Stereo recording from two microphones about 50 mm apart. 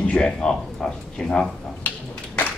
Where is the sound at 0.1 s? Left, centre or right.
Centre.